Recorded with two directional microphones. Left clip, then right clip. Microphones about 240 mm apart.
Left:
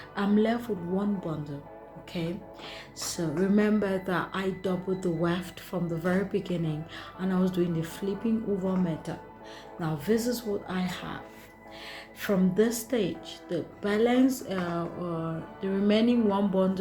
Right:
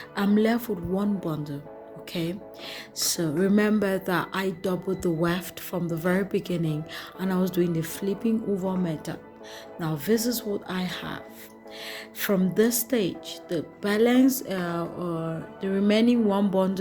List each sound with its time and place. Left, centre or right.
0.2 s speech: right